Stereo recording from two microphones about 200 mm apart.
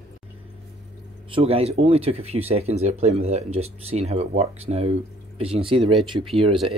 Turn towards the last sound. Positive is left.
turn(degrees=-25)  # may be behind; listen again after turning